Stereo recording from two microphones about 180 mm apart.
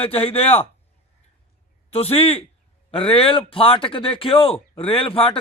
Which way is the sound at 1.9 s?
35° left (ahead or behind).